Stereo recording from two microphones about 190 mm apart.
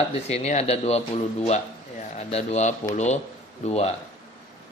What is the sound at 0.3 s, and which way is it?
Speech, 35° left (ahead or behind).